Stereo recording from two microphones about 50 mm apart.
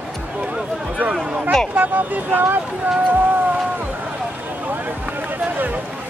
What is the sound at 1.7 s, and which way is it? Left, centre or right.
Speech, right.